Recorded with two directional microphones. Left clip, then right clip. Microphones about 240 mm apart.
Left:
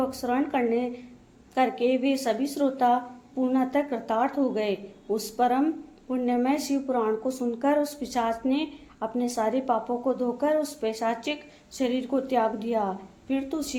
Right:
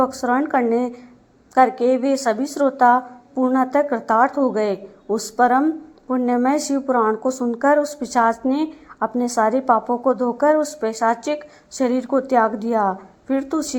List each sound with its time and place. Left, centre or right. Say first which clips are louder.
0.0 s a woman's voice: right 8 dB; right